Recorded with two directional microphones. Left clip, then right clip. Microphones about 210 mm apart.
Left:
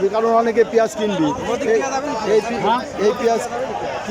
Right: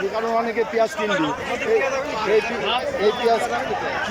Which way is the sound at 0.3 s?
10° left (ahead or behind).